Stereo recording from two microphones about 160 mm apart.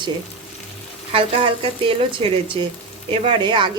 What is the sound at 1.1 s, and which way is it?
A woman's voice, 35° right (ahead or behind).